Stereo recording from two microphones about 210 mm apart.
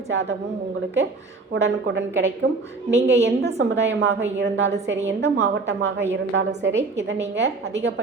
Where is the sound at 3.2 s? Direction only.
55° right (ahead or behind).